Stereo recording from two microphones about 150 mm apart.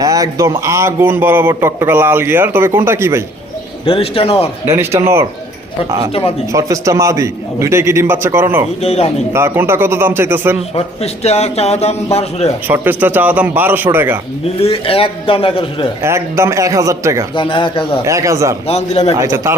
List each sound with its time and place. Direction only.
0.0 s a man's voice: 25° right (ahead or behind)
3.8 s a man's voice: 40° left (ahead or behind)
4.7 s a man's voice: 15° right (ahead or behind)
6.5 s a man's voice: 20° right (ahead or behind)
8.8 s a man's voice: 45° left (ahead or behind)
9.3 s a man's voice: 15° right (ahead or behind)
10.8 s a man's voice: 45° left (ahead or behind)
12.6 s a man's voice: 15° right (ahead or behind)
14.4 s a man's voice: 40° left (ahead or behind)
16.0 s a man's voice: 20° right (ahead or behind)
17.3 s a man's voice: 35° left (ahead or behind)
18.0 s a man's voice: 20° right (ahead or behind)
18.7 s a man's voice: 45° left (ahead or behind)
19.1 s a man's voice: 20° right (ahead or behind)